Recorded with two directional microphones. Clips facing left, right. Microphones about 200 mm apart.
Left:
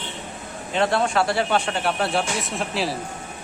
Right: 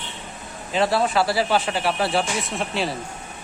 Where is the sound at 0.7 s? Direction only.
5° right (ahead or behind).